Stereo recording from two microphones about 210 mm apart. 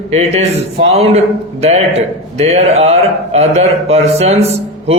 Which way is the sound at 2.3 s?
30° right (ahead or behind).